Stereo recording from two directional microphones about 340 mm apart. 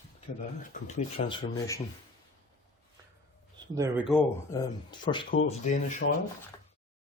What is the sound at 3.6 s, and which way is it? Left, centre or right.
Speech, centre.